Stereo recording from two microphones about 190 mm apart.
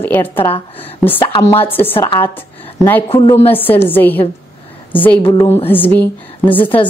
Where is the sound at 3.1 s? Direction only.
20° left (ahead or behind).